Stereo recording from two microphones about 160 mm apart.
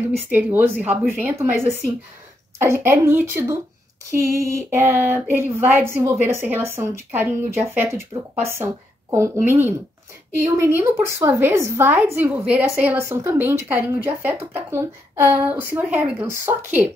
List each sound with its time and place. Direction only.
0.3 s a woman's voice: 15° right (ahead or behind)